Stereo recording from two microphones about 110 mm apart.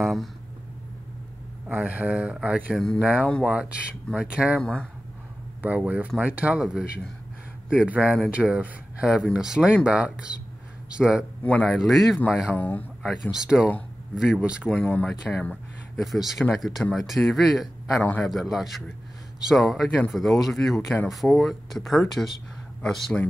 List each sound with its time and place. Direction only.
0.0 s speech: centre (ahead or behind)
1.7 s speech: 15° right (ahead or behind)
4.6 s speech: 10° left (ahead or behind)
5.6 s speech: 15° right (ahead or behind)
11.4 s speech: 10° left (ahead or behind)
11.7 s speech: centre (ahead or behind)
12.4 s speech: 15° left (ahead or behind)
13.0 s speech: 5° right (ahead or behind)
14.7 s speech: 10° left (ahead or behind)
16.0 s speech: centre (ahead or behind)
17.9 s speech: 15° left (ahead or behind)
18.2 s speech: centre (ahead or behind)